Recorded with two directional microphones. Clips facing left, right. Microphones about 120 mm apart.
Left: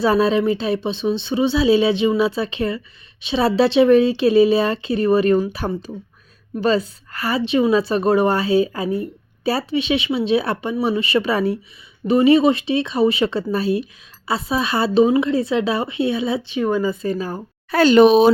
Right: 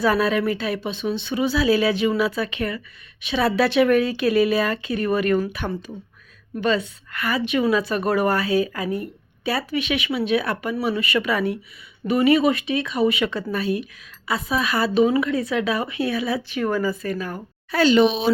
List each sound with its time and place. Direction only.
0.0 s speech: 30° left (ahead or behind)
17.7 s speech: 50° left (ahead or behind)